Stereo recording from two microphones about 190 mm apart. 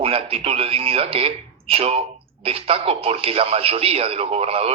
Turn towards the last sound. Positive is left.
turn(degrees=-30)  # may be behind; listen again after turning